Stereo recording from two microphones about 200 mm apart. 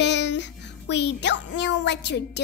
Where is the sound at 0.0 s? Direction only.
60° left (ahead or behind).